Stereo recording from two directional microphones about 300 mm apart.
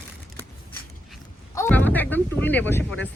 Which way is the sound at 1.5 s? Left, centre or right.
Centre.